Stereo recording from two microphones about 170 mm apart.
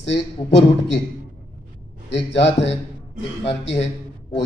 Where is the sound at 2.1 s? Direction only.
90° left.